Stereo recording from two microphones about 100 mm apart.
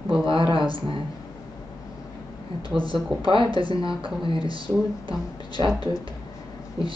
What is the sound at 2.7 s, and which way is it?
Speech, 60° right (ahead or behind).